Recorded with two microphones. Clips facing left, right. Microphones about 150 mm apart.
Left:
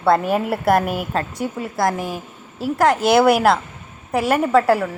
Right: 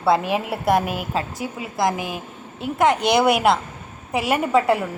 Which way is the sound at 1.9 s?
30° left (ahead or behind).